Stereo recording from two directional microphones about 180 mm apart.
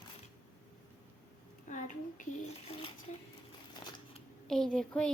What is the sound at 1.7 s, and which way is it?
Speech, 45° left (ahead or behind).